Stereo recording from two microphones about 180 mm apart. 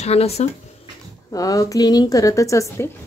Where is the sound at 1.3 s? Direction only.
20° left (ahead or behind).